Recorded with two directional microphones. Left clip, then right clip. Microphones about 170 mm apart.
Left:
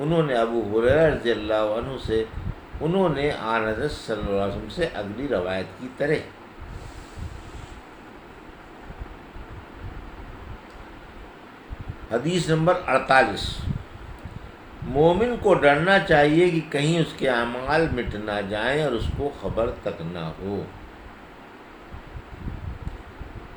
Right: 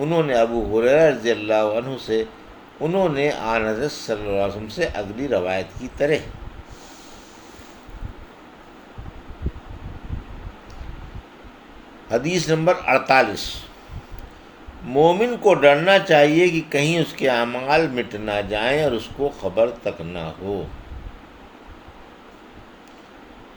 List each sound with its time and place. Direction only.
0.0 s speech: 40° right (ahead or behind)
12.1 s speech: 40° right (ahead or behind)
14.9 s speech: 40° right (ahead or behind)